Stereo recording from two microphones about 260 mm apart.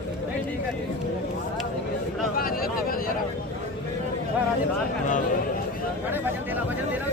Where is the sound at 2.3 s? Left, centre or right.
Left.